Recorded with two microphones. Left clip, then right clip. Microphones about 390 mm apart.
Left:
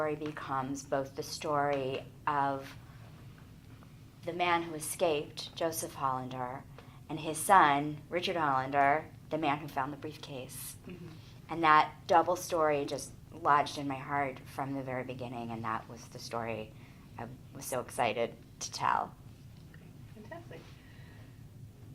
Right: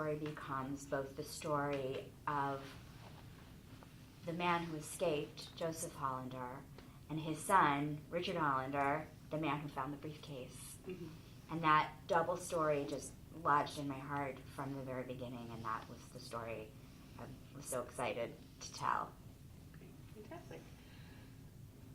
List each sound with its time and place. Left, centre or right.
0.0 s a woman's voice: left
4.4 s a woman's voice: left
11.4 s a woman's voice: left